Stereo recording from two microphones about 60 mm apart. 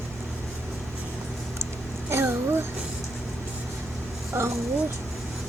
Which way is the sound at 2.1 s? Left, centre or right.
Right.